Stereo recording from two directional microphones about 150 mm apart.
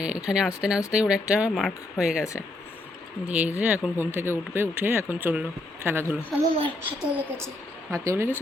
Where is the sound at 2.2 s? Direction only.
20° left (ahead or behind).